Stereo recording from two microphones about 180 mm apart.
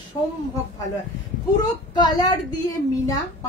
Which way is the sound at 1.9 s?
25° left (ahead or behind).